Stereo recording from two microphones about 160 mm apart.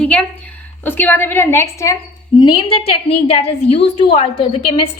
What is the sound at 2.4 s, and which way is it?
A woman's voice, 30° left (ahead or behind).